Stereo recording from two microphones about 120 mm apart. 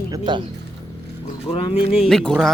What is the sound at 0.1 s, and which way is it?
Speech, 40° right (ahead or behind).